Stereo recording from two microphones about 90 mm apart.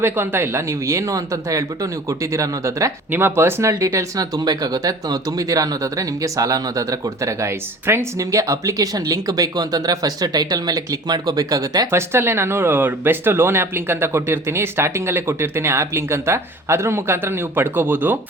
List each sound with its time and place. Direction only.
0.0 s speech: 25° right (ahead or behind)
3.1 s speech: 25° right (ahead or behind)
4.4 s speech: 45° right (ahead or behind)
11.9 s speech: 30° right (ahead or behind)